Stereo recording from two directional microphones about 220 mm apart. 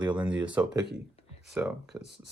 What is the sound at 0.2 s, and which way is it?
Speech, 5° right (ahead or behind).